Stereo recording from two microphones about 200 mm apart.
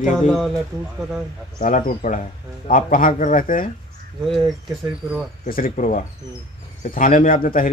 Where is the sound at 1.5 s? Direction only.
45° left (ahead or behind).